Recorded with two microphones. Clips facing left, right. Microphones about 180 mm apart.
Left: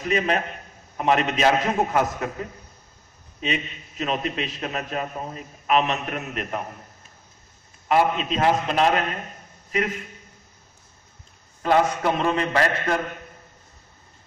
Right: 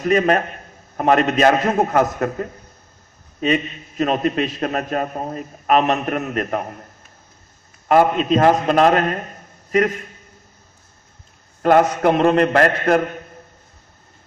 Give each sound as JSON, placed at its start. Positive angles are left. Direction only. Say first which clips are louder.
{"t": 0.0, "sound": "a man's voice", "louder": "right 7 dB", "side_deg": -50}
{"t": 7.9, "sound": "a man's voice", "louder": "right 6 dB", "side_deg": -45}
{"t": 11.8, "sound": "a man's voice", "louder": "right 7 dB", "side_deg": -55}